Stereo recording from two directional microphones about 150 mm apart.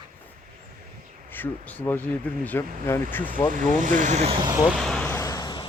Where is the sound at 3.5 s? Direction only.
60° right (ahead or behind).